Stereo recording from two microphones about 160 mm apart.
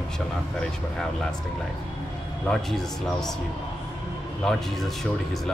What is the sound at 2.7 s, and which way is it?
Speech, 5° left (ahead or behind).